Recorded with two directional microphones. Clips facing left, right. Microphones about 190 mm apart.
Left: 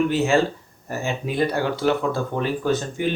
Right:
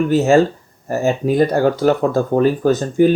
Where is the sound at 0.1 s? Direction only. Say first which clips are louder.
Right 7 dB; 45° right (ahead or behind).